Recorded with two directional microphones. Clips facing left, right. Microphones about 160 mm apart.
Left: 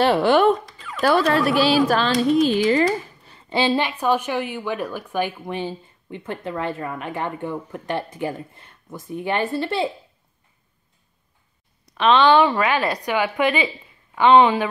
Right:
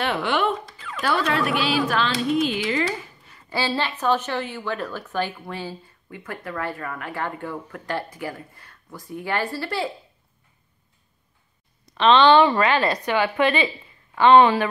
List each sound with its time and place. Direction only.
0.0 s speech: 35° left (ahead or behind)
0.7 s dog: centre (ahead or behind)
1.0 s speech: 40° left (ahead or behind)
3.3 s speech: 25° left (ahead or behind)
11.9 s a woman's voice: 5° left (ahead or behind)